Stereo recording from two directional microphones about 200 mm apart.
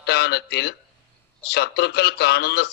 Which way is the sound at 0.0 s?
55° left (ahead or behind).